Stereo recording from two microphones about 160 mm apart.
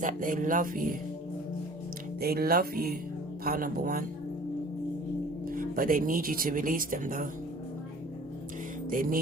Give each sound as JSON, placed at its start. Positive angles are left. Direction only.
{"t": 0.0, "sound": "speech", "side_deg": -55}
{"t": 2.2, "sound": "music", "side_deg": -75}
{"t": 5.5, "sound": "speech", "side_deg": -60}
{"t": 8.9, "sound": "speech", "side_deg": -60}